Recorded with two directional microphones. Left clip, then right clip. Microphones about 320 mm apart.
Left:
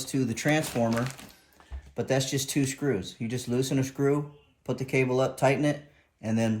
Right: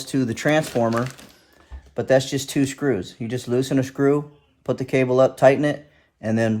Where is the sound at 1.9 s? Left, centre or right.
Right.